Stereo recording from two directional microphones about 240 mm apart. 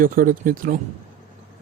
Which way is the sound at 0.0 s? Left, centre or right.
Right.